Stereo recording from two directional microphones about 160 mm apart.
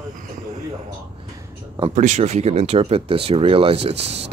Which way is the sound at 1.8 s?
45° right (ahead or behind).